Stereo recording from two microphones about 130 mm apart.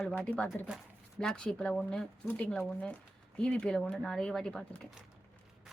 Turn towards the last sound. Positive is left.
turn(degrees=5)  # may be behind; listen again after turning